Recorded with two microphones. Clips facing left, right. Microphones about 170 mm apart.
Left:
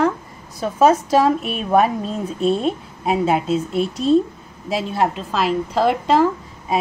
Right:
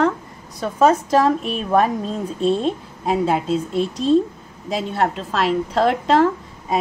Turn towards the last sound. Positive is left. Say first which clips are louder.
# even
turn(degrees=5)  # may be behind; listen again after turning